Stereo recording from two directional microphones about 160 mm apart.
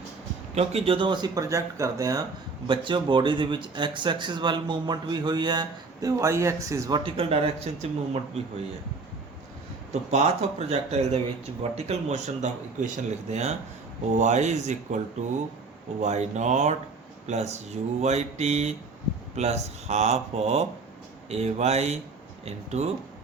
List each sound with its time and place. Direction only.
0.5 s speech: 40° right (ahead or behind); by 7.0 s 20° right (ahead or behind)
7.0 s speech: 35° right (ahead or behind)
9.9 s speech: 40° right (ahead or behind)